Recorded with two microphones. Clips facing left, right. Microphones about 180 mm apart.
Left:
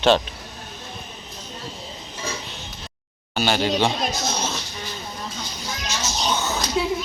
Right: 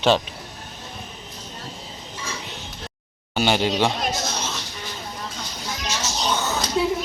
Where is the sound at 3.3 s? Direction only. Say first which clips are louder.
Right 1 dB; 15° right (ahead or behind).